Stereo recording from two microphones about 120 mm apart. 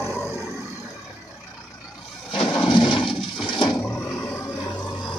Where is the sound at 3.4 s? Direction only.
40° left (ahead or behind).